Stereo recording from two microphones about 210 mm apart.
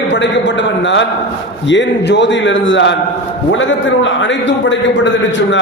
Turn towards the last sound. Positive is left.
turn(degrees=60)  # may be behind; listen again after turning